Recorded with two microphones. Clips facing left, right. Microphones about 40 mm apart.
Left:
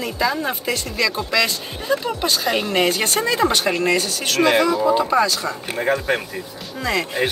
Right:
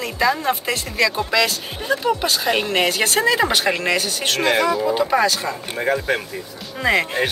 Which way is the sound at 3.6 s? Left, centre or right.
Right.